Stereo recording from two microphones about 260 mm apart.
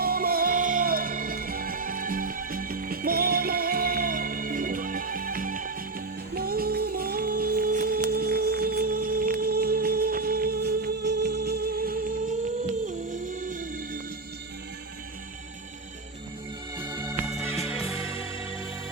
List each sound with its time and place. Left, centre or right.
0.0 s music: right
16.7 s organ: centre
17.5 s music: left